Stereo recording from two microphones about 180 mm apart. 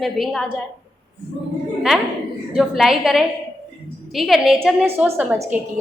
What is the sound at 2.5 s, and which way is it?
A woman's voice, centre (ahead or behind).